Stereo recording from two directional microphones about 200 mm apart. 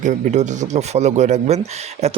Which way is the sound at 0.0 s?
40° right (ahead or behind).